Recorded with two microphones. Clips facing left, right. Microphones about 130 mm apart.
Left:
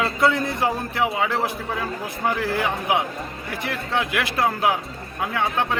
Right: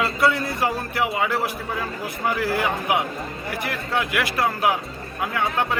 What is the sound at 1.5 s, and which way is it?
Speech, centre (ahead or behind).